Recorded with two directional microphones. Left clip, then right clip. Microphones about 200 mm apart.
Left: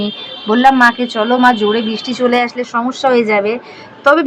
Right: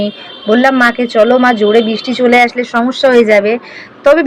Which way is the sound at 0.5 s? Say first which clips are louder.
Even; 10° right (ahead or behind).